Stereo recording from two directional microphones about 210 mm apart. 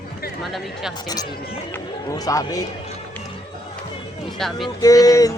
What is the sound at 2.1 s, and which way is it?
Music, 15° left (ahead or behind).